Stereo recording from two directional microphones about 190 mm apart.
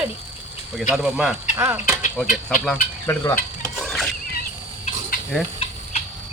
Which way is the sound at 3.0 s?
15° left (ahead or behind).